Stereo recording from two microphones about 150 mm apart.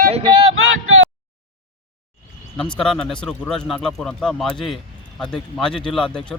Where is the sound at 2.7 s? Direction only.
5° left (ahead or behind).